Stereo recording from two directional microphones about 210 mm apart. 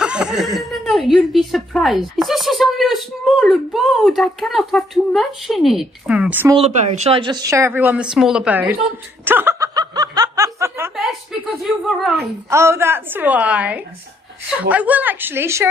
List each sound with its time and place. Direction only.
0.0 s a woman's voice: 5° right (ahead or behind)
6.5 s a woman's voice: 30° right (ahead or behind); by 8.7 s 5° right (ahead or behind)
9.2 s snicker: 10° right (ahead or behind)
11.9 s a woman's voice: centre (ahead or behind)
12.4 s a woman's voice: 15° right (ahead or behind)